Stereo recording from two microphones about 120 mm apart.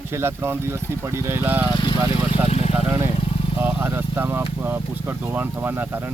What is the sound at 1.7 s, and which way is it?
Speech, 45° left (ahead or behind).